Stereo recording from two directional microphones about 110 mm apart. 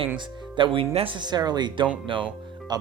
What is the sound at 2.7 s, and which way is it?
Speech, 40° right (ahead or behind).